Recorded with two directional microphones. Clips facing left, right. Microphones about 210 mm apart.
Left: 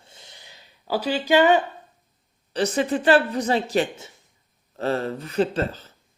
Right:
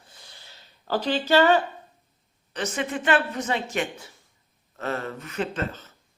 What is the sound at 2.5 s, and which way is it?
A woman's voice, 35° left (ahead or behind).